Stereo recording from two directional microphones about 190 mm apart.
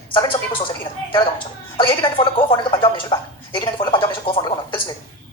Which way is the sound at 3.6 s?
25° left (ahead or behind).